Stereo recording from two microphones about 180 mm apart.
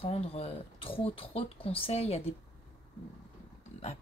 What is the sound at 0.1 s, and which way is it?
Speech, 35° left (ahead or behind).